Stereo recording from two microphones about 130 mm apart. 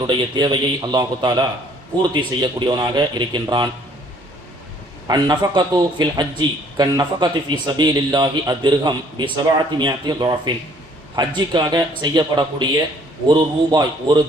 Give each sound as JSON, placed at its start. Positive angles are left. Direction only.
{"t": 0.0, "sound": "a man's voice", "side_deg": -35}
{"t": 5.0, "sound": "a man's voice", "side_deg": -35}